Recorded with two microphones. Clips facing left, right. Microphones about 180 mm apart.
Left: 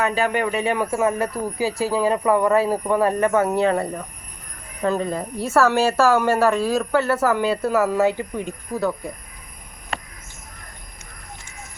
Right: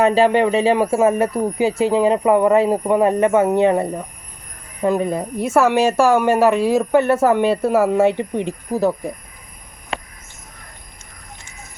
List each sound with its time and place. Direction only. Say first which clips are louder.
0.0 s a woman's voice: right 7 dB; 30° right (ahead or behind)